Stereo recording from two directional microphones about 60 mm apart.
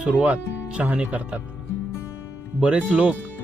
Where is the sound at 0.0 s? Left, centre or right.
Right.